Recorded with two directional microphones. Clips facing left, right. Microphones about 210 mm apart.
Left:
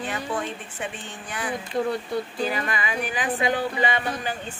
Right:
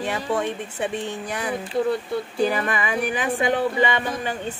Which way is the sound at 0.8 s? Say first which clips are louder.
Right 9 dB; 40° right (ahead or behind).